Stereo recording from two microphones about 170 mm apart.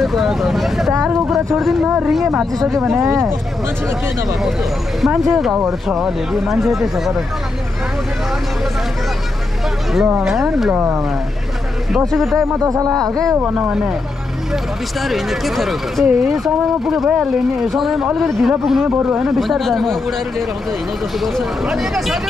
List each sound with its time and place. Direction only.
0.0 s speech: centre (ahead or behind)
4.3 s speech: centre (ahead or behind)
10.0 s speech: 5° right (ahead or behind)
12.1 s speech: centre (ahead or behind)
12.5 s speech: 20° right (ahead or behind)
13.1 s speech: centre (ahead or behind)